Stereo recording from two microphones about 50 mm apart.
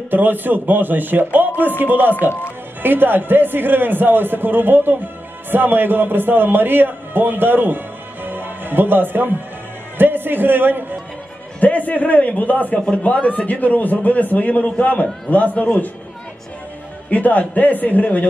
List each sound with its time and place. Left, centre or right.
0.1 s a man's voice: right
11.6 s a man's voice: left
17.1 s a man's voice: left